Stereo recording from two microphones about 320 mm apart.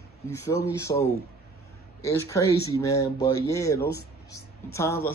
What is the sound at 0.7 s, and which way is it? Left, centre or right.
Speech, centre.